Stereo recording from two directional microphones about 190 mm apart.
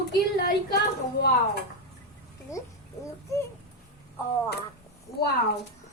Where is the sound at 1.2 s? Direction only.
55° left (ahead or behind).